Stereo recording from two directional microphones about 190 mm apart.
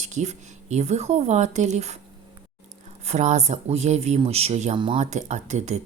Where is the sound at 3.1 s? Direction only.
35° right (ahead or behind).